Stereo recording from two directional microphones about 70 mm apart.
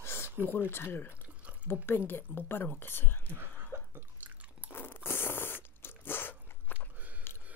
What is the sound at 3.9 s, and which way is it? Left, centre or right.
Drip, right.